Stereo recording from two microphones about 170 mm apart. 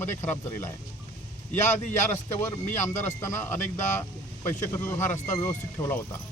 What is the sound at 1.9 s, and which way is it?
Speech, 15° left (ahead or behind).